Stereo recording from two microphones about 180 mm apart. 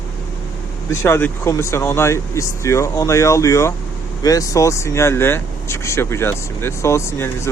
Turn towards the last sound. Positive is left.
turn(degrees=15)  # may be behind; listen again after turning